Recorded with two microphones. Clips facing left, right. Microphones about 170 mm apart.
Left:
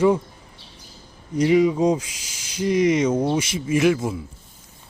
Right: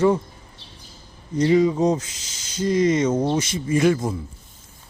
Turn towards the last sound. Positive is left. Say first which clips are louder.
# even
turn(degrees=5)  # may be behind; listen again after turning